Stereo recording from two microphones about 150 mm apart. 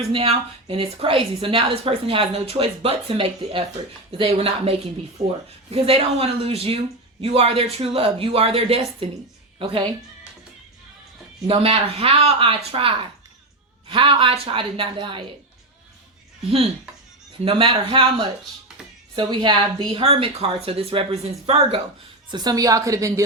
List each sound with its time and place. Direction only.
0.1 s a woman's voice: 40° right (ahead or behind)
11.4 s a woman's voice: 40° right (ahead or behind)
17.4 s a woman's voice: 35° right (ahead or behind)
22.3 s a woman's voice: 25° right (ahead or behind)